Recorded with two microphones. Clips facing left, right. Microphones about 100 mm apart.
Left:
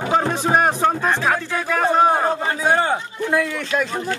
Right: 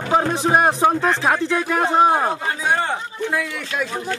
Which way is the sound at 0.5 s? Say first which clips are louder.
Right 1 dB; 15° right (ahead or behind).